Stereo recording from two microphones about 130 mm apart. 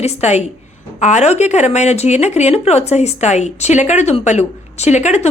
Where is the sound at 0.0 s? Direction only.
60° left (ahead or behind).